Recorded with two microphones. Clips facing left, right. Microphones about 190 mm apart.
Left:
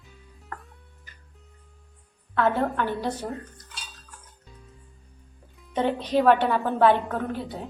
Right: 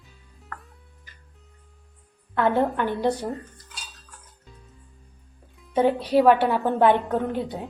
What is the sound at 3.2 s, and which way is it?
Dishes, centre (ahead or behind).